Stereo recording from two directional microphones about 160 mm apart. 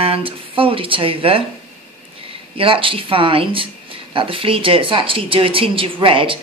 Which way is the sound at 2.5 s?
35° right (ahead or behind).